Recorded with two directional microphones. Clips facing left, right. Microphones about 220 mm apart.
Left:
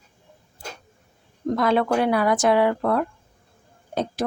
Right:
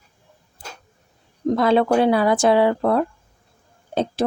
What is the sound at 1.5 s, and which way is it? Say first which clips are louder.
Speech: right 4 dB; 30° right (ahead or behind).